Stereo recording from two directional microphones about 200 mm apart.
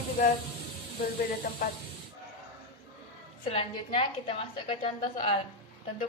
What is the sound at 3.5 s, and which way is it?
A woman's voice, 25° left (ahead or behind).